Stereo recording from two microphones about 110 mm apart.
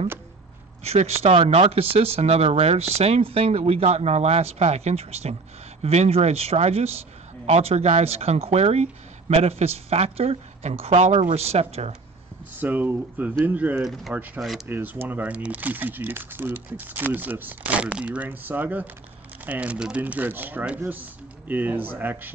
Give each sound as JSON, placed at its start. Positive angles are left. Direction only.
{"t": 0.8, "sound": "speech", "side_deg": -70}
{"t": 12.5, "sound": "speech", "side_deg": -15}